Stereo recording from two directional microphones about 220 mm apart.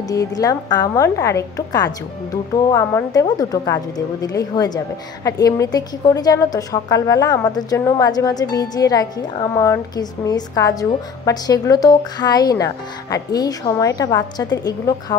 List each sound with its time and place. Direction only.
0.1 s a woman's voice: 15° left (ahead or behind)